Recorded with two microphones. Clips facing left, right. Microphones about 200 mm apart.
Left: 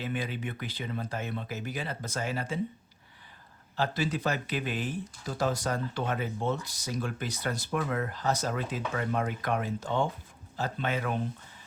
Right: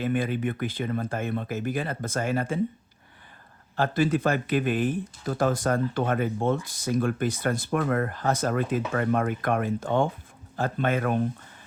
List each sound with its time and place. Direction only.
0.0 s speech: 50° right (ahead or behind)
3.8 s speech: 50° right (ahead or behind)